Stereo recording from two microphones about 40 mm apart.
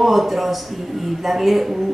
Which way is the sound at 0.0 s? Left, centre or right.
Centre.